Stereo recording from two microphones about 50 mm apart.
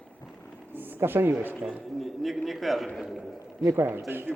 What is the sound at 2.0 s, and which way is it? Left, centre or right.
A man's voice, centre.